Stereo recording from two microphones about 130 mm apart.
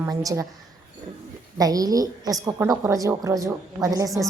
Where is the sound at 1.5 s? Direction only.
30° right (ahead or behind).